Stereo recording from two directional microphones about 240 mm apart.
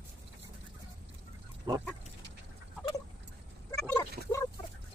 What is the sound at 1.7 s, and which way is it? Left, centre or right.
Pig, centre.